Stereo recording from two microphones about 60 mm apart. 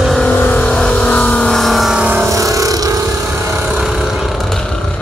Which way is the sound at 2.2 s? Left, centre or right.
Right.